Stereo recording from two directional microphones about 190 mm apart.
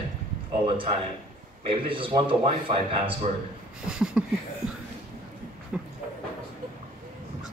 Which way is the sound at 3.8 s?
5° right (ahead or behind).